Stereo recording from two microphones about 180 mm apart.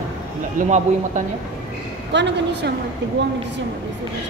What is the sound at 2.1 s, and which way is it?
Speech, 70° right (ahead or behind).